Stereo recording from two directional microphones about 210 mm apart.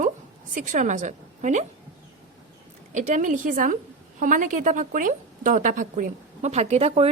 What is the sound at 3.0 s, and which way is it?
A woman's voice, 35° right (ahead or behind).